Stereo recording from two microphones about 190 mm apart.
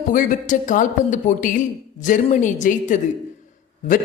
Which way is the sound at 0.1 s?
45° left (ahead or behind).